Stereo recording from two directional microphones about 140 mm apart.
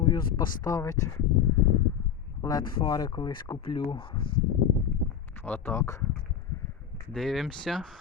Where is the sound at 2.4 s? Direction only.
25° left (ahead or behind).